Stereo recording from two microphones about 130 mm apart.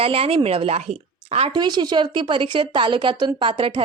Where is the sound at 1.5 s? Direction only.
35° right (ahead or behind).